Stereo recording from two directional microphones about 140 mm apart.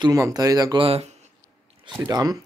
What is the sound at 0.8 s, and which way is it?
Speech, 45° right (ahead or behind).